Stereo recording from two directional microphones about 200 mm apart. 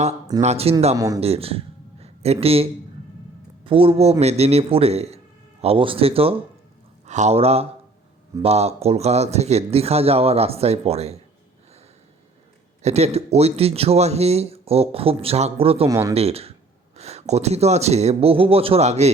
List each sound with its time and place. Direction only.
0.4 s speech: 30° right (ahead or behind)
0.9 s speech: 20° right (ahead or behind)
1.2 s speech: 30° right (ahead or behind)
3.7 s speech: 25° right (ahead or behind)
12.8 s speech: 35° right (ahead or behind)
15.9 s speech: 15° right (ahead or behind)
16.1 s speech: 30° right (ahead or behind)